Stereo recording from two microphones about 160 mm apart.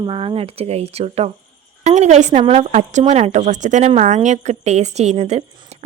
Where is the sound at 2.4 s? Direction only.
35° right (ahead or behind).